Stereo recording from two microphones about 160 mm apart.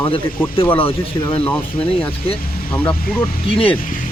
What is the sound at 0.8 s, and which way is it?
Speech, 35° left (ahead or behind).